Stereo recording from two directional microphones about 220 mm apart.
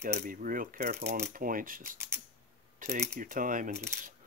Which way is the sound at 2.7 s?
30° right (ahead or behind).